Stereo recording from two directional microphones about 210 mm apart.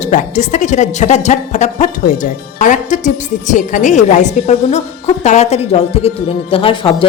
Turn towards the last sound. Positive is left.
turn(degrees=25)  # may be behind; listen again after turning